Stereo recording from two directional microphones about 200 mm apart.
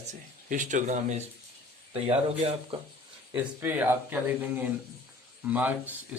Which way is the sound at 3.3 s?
10° right (ahead or behind).